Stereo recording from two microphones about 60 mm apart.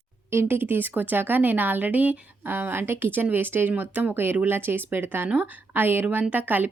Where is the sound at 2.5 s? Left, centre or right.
Right.